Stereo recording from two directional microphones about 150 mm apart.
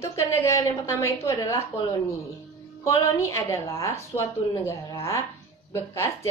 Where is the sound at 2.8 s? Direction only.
20° left (ahead or behind).